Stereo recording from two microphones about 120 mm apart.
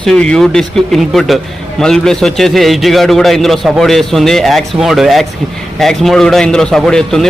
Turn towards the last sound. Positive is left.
turn(degrees=5)  # may be behind; listen again after turning